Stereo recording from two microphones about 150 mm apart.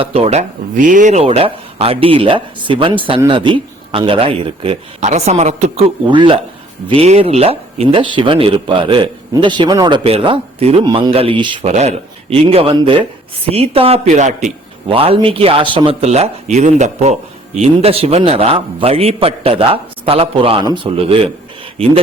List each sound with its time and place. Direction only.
0.0 s speech: 40° right (ahead or behind)
6.1 s speech: 35° right (ahead or behind)
10.8 s speech: 30° right (ahead or behind)
11.1 s speech: 40° right (ahead or behind)
11.6 s speech: 50° right (ahead or behind)
14.9 s speech: 40° right (ahead or behind)